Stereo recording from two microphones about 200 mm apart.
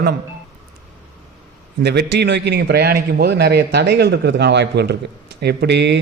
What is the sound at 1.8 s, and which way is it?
Speech, 55° right (ahead or behind).